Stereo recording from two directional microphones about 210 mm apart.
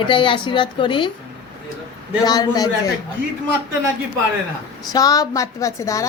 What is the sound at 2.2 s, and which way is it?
Speech, 20° left (ahead or behind).